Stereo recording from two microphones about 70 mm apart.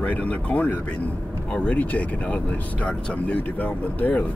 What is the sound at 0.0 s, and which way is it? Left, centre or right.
Speech, left.